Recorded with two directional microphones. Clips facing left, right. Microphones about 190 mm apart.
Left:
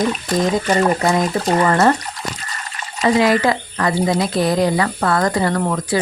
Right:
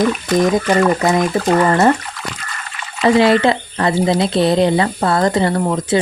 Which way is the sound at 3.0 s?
30° right (ahead or behind).